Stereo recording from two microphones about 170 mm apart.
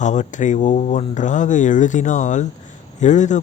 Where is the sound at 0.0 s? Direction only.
45° left (ahead or behind).